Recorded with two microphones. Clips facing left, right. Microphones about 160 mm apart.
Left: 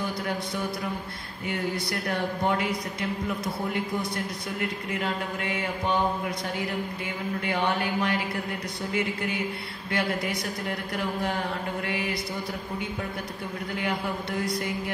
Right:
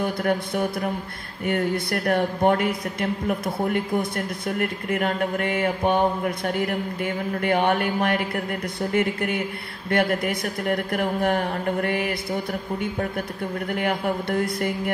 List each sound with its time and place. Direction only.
0.0 s a man's voice: 55° right (ahead or behind)